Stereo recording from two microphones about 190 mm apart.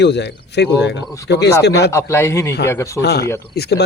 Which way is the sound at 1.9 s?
15° left (ahead or behind).